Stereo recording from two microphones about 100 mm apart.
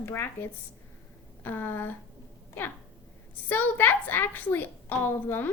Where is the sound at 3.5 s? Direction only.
20° left (ahead or behind).